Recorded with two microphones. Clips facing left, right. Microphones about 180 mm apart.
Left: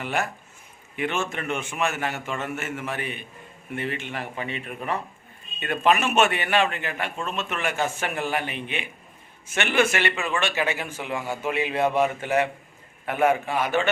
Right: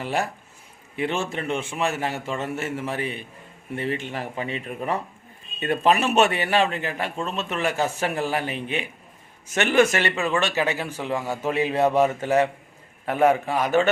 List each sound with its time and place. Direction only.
0.0 s a man's voice: 35° right (ahead or behind)